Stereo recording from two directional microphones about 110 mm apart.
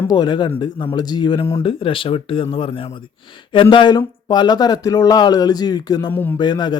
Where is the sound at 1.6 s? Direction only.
55° left (ahead or behind); by 6.1 s 40° left (ahead or behind).